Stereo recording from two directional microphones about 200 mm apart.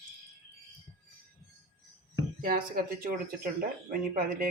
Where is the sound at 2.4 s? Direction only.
45° right (ahead or behind).